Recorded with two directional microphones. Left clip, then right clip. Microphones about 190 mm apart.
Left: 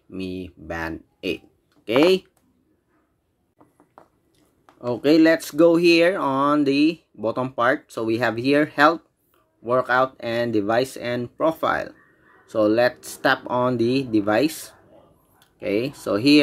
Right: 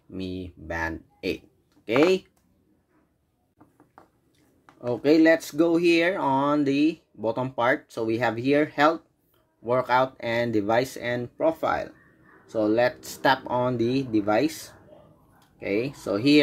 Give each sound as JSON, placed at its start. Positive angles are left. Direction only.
{"t": 0.1, "sound": "speech", "side_deg": 10}
{"t": 4.6, "sound": "speech", "side_deg": 20}
{"t": 9.6, "sound": "speech", "side_deg": 10}